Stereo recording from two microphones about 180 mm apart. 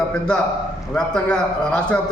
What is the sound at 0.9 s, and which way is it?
A man's voice, 5° left (ahead or behind).